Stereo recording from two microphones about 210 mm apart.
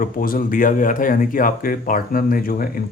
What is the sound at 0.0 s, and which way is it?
Speech, 40° left (ahead or behind).